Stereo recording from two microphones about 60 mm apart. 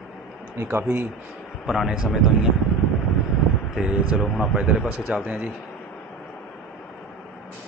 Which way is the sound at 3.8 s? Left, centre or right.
Centre.